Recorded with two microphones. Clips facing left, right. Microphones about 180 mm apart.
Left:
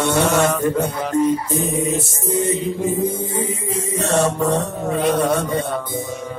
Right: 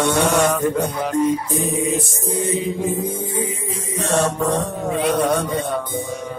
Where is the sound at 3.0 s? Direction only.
45° left (ahead or behind).